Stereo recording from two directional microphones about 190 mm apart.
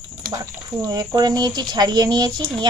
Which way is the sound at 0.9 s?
20° right (ahead or behind).